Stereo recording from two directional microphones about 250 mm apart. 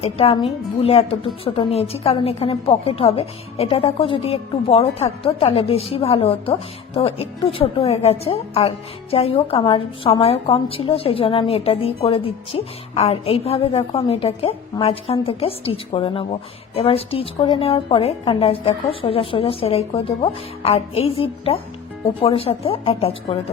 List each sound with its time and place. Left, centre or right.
0.0 s a woman's voice: left